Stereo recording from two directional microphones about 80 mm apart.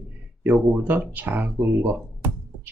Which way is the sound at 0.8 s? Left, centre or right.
Right.